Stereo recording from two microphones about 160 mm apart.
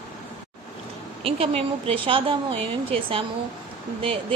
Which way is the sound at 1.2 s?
35° right (ahead or behind).